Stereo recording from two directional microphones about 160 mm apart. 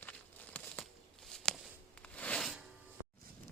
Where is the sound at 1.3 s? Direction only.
5° left (ahead or behind).